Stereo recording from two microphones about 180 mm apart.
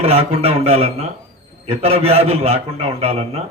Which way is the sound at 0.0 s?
35° right (ahead or behind).